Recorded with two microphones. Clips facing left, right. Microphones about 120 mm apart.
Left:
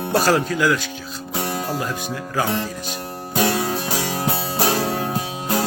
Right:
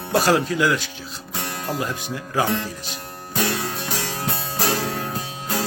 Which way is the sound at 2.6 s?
25° left (ahead or behind).